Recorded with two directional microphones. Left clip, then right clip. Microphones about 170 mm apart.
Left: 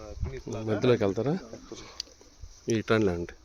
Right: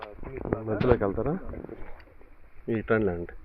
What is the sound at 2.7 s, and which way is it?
Speech, 40° left (ahead or behind).